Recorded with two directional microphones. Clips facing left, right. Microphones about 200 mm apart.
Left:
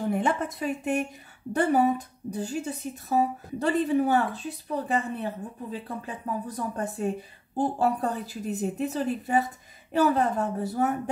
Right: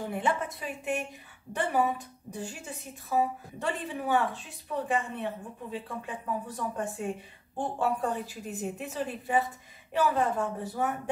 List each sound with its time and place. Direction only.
0.1 s a woman's voice: 40° left (ahead or behind)